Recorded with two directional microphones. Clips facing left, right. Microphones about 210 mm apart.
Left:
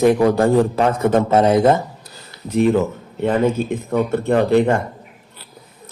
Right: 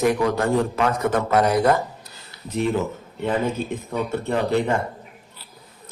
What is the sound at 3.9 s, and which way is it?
Speech, 55° left (ahead or behind).